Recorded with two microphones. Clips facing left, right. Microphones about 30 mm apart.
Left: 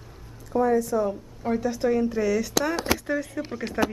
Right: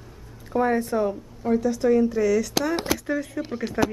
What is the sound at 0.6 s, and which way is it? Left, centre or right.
Speech, right.